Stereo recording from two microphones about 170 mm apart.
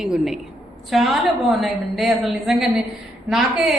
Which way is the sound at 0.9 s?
Centre (ahead or behind).